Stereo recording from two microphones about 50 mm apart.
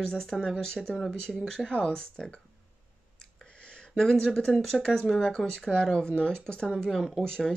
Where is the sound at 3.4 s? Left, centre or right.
Centre.